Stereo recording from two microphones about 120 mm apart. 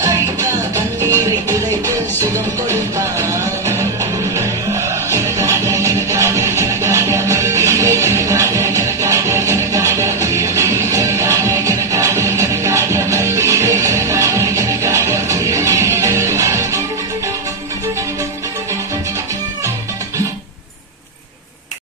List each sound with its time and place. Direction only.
1.0 s music: 25° right (ahead or behind)